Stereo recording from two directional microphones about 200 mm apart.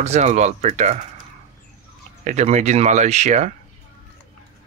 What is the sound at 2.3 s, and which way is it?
Speech, 35° right (ahead or behind).